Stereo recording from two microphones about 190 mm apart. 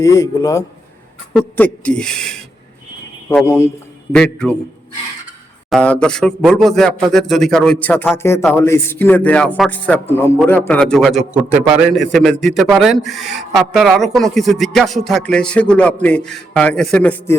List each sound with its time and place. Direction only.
0.0 s a man's voice: 20° left (ahead or behind)
1.4 s music: 10° left (ahead or behind)
3.4 s a man's voice: 15° left (ahead or behind)
4.1 s music: 5° left (ahead or behind)
5.7 s a man's voice: 5° left (ahead or behind)
11.9 s music: centre (ahead or behind)